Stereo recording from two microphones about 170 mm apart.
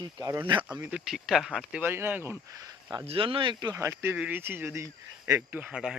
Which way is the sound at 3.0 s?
30° right (ahead or behind).